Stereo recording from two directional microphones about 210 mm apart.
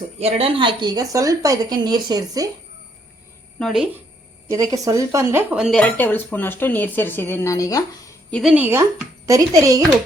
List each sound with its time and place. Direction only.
0.2 s a woman's voice: 30° right (ahead or behind)
3.6 s speech: centre (ahead or behind)
4.4 s speech: 15° right (ahead or behind); by 8.1 s 15° left (ahead or behind)
8.3 s speech: centre (ahead or behind); by 9.8 s 15° right (ahead or behind)